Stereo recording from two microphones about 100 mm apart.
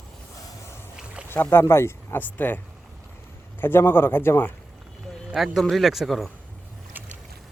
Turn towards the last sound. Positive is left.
turn(degrees=0)  # may be behind; listen again after turning